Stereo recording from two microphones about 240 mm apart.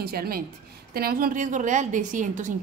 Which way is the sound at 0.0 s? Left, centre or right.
Right.